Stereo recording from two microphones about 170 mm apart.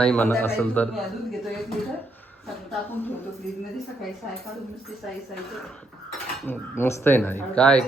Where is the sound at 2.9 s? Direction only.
10° left (ahead or behind).